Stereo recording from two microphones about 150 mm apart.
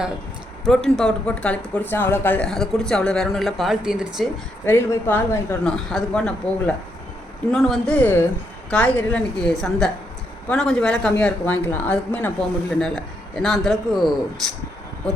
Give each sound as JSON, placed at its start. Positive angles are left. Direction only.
{"t": 0.9, "sound": "speech", "side_deg": 5}
{"t": 4.6, "sound": "a woman's voice", "side_deg": 15}